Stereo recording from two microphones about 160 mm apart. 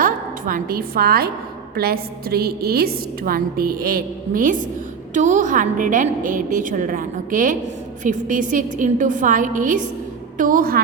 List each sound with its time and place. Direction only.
0.0 s a woman's voice: 60° right (ahead or behind)